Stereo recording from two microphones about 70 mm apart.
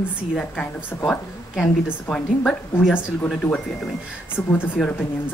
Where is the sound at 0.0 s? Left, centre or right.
Left.